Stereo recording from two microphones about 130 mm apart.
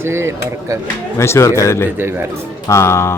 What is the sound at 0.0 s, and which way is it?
Speech, 20° right (ahead or behind).